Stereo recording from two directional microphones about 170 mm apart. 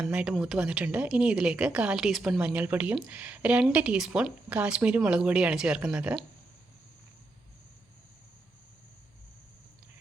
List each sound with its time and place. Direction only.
0.0 s speech: 5° right (ahead or behind)